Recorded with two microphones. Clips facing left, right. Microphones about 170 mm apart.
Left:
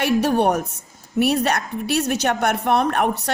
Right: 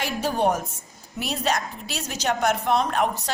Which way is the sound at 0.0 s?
65° left (ahead or behind).